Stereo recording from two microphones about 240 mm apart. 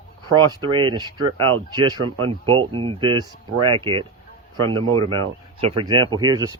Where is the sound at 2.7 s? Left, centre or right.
Right.